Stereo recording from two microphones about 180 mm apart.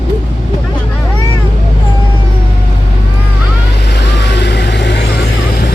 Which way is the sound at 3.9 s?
70° left (ahead or behind).